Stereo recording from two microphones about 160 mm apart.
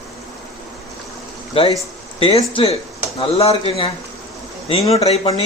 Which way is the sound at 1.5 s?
35° left (ahead or behind).